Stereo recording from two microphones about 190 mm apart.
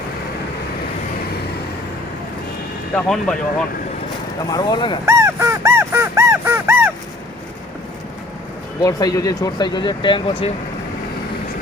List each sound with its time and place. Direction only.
2.9 s speech: 5° left (ahead or behind)
4.4 s speech: 20° left (ahead or behind)
5.0 s music: 15° right (ahead or behind)
8.8 s speech: 20° left (ahead or behind)